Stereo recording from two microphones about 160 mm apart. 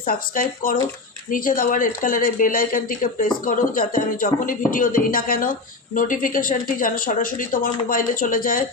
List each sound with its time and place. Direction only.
0.0 s speech: 60° left (ahead or behind)